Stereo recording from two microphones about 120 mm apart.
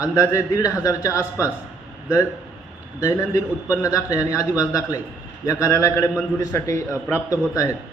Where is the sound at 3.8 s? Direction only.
30° left (ahead or behind).